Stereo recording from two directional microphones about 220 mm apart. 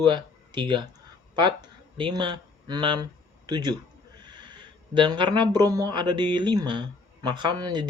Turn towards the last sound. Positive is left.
turn(degrees=-20)  # may be behind; listen again after turning